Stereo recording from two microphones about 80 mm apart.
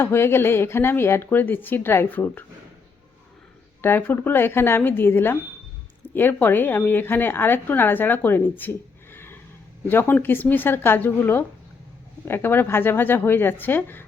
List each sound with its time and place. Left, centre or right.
0.0 s a woman's voice: left
3.8 s a woman's voice: left
9.1 s neigh: left
9.8 s a woman's voice: left